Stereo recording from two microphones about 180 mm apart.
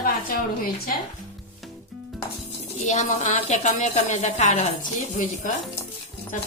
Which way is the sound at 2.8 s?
40° left (ahead or behind).